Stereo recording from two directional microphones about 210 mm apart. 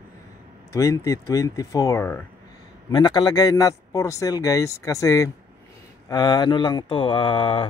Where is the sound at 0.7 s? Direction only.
15° left (ahead or behind).